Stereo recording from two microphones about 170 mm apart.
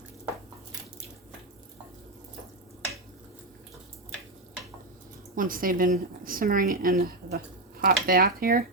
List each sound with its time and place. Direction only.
5.3 s a woman's voice: 55° right (ahead or behind)